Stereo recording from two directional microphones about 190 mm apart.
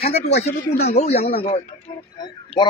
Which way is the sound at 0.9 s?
35° left (ahead or behind).